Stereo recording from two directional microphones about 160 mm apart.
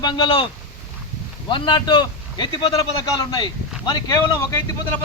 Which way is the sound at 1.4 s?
30° left (ahead or behind).